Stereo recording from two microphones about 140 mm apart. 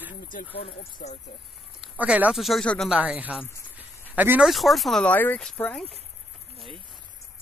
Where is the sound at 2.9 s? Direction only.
10° right (ahead or behind).